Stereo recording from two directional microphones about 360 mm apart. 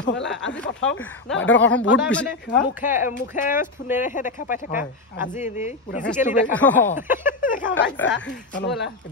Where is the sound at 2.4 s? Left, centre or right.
Left.